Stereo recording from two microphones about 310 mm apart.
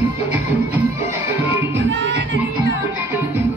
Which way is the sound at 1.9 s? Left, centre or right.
Right.